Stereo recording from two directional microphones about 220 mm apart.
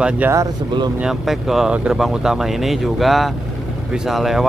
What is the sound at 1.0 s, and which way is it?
Speech, centre (ahead or behind).